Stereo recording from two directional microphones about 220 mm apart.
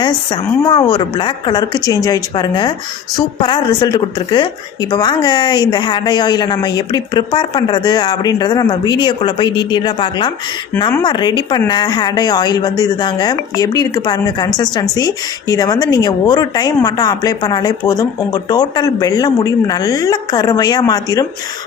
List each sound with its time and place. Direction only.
0.6 s a woman's voice: 15° left (ahead or behind)